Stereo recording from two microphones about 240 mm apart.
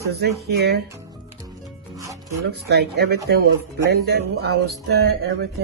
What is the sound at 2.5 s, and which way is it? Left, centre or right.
Speech, right.